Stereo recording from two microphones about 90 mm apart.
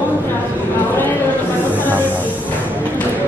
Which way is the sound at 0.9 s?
20° left (ahead or behind).